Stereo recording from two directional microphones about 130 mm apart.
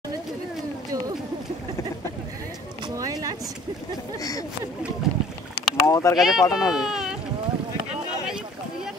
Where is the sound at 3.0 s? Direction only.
30° right (ahead or behind).